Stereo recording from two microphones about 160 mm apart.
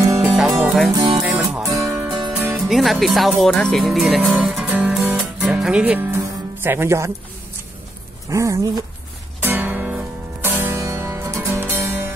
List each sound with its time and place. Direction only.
0.0 s music: 20° right (ahead or behind)
0.3 s music: centre (ahead or behind)
0.9 s music: 25° right (ahead or behind)
1.2 s music: 10° right (ahead or behind)
8.3 s speech: 20° right (ahead or behind)
9.4 s music: 10° right (ahead or behind)